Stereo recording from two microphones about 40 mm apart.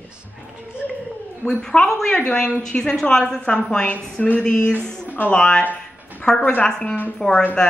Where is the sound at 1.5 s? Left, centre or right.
Centre.